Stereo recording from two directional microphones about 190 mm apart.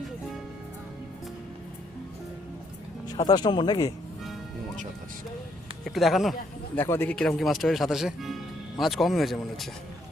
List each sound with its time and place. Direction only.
3.1 s speech: 20° left (ahead or behind)
5.8 s speech: centre (ahead or behind)
6.7 s speech: 10° left (ahead or behind)